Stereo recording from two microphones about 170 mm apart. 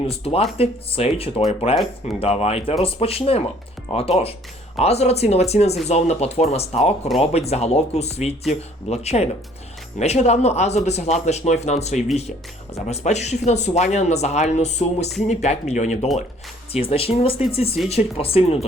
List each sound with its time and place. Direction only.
0.1 s speech: 35° left (ahead or behind)